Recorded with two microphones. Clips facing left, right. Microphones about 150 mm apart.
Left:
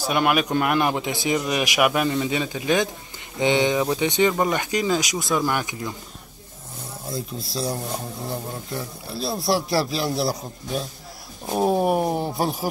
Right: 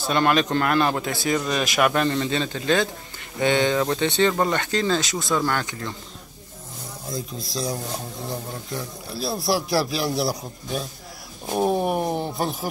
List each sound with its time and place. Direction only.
0.0 s a man's voice: 10° left (ahead or behind)
7.1 s speech: 5° left (ahead or behind)
11.4 s a man's voice: centre (ahead or behind)